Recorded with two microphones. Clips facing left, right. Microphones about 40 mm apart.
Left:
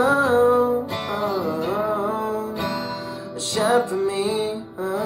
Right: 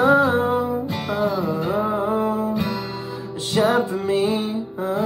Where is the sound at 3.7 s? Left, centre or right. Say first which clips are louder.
Even; right.